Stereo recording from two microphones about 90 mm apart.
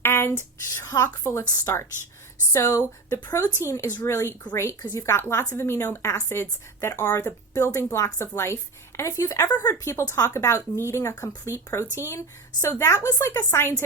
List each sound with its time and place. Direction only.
0.0 s a woman's voice: 25° left (ahead or behind)